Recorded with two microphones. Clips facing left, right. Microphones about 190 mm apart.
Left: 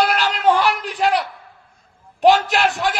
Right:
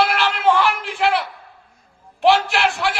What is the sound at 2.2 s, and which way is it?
Speech, 40° left (ahead or behind).